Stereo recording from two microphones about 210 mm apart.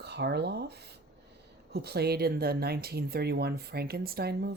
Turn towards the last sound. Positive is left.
turn(degrees=-50)  # may be behind; listen again after turning